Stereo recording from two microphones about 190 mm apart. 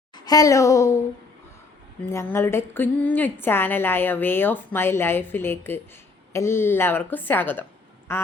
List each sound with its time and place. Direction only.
0.3 s a woman's voice: 15° left (ahead or behind)
2.0 s a woman's voice: 15° left (ahead or behind)